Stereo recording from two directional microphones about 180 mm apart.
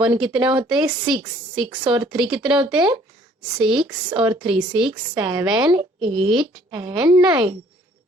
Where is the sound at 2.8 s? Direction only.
25° right (ahead or behind).